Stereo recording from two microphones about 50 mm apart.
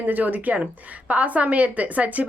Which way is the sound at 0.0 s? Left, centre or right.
Right.